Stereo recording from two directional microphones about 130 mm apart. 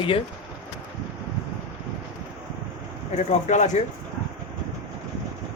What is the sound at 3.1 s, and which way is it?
Speech, 65° left (ahead or behind).